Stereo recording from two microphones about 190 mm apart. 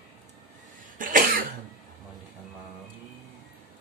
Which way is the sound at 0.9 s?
45° right (ahead or behind).